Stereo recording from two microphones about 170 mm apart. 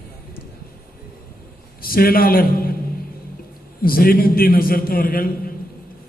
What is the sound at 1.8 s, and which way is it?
Speech, 60° left (ahead or behind).